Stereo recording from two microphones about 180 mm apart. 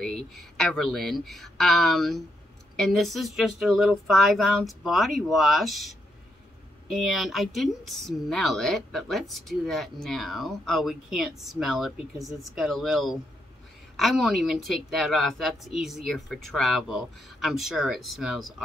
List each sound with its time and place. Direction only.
0.0 s a woman's voice: centre (ahead or behind)